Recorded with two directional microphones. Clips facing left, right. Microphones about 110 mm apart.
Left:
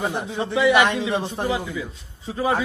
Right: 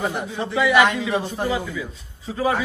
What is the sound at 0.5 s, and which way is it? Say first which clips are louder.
Speech: even; 25° left (ahead or behind).